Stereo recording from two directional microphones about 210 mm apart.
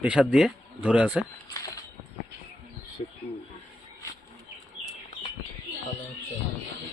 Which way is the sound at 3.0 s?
30° left (ahead or behind).